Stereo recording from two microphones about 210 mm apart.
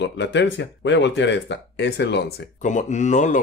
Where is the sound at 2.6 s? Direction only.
35° left (ahead or behind).